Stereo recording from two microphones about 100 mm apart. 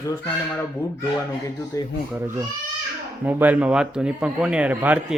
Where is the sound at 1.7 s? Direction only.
35° left (ahead or behind).